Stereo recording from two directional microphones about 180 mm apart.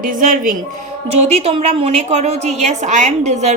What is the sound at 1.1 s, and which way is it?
A woman's voice, 35° right (ahead or behind).